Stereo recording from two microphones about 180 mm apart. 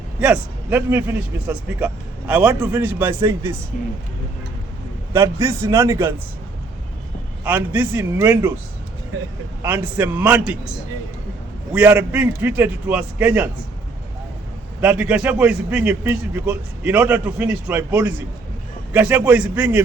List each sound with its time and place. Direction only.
0.2 s a man's voice: 10° right (ahead or behind)
5.1 s a man's voice: 15° right (ahead or behind)
7.4 s a man's voice: 10° right (ahead or behind)
9.6 s a man's voice: 10° right (ahead or behind)
11.7 s a man's voice: 10° right (ahead or behind)
14.8 s a man's voice: 10° right (ahead or behind)